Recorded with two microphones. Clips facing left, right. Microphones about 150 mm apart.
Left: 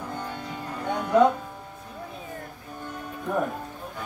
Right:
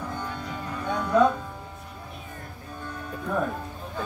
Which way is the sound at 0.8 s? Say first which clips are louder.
Left 1 dB; 20° left (ahead or behind).